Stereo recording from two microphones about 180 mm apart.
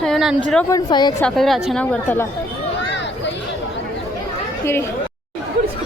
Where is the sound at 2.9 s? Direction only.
75° left (ahead or behind).